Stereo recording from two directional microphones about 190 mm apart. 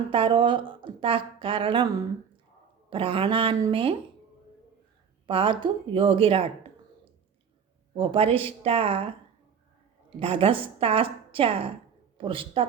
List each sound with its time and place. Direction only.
0.1 s a woman's voice: 25° right (ahead or behind)
2.9 s a woman's voice: 30° right (ahead or behind)
5.2 s a woman's voice: 25° right (ahead or behind)
7.9 s a woman's voice: 30° right (ahead or behind)
10.2 s a woman's voice: 30° right (ahead or behind)